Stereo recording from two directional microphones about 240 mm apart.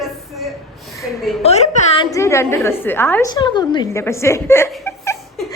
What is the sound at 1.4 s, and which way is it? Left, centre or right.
Speech, left.